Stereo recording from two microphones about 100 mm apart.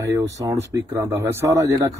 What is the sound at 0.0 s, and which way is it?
Speech, 30° right (ahead or behind).